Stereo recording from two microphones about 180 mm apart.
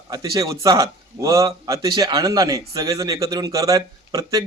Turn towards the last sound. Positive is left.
turn(degrees=-20)  # may be behind; listen again after turning